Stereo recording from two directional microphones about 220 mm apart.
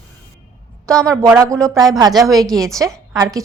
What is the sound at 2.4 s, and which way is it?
Speech, centre (ahead or behind).